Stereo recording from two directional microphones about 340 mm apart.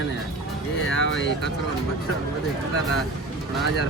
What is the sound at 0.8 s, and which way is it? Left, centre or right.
Speech, left.